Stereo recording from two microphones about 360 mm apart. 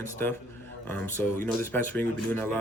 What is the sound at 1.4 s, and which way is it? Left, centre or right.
A man's voice, centre.